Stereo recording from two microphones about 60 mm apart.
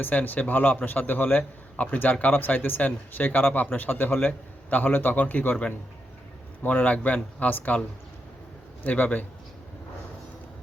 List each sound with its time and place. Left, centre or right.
0.0 s speech: left